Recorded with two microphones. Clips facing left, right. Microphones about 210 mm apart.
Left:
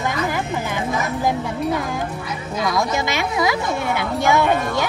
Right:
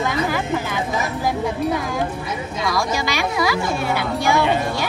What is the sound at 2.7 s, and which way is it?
Speech, 20° left (ahead or behind).